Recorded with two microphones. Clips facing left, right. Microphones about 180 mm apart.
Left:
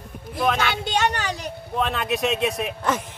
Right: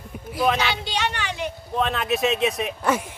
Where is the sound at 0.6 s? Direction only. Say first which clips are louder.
Left 3 dB; 50° left (ahead or behind).